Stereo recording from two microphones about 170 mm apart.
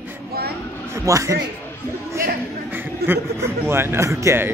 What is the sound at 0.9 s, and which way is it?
Speech, 20° right (ahead or behind).